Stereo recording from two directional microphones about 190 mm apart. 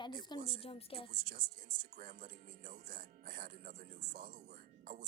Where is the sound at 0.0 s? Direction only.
25° left (ahead or behind).